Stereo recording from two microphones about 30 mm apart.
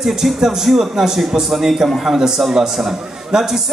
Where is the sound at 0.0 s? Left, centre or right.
Centre.